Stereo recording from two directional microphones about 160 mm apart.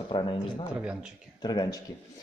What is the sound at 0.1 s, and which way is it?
Speech, 30° left (ahead or behind).